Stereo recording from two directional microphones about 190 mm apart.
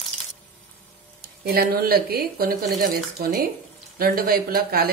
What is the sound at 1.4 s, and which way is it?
Speech, 55° right (ahead or behind).